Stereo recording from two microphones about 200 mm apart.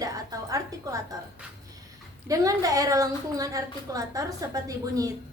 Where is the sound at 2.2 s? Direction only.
15° right (ahead or behind).